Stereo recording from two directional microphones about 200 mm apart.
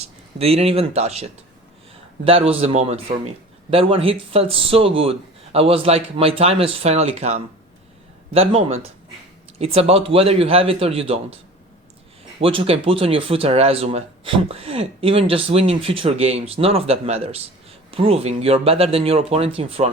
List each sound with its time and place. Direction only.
0.3 s a man's voice: 30° right (ahead or behind)
12.4 s a man's voice: 30° right (ahead or behind)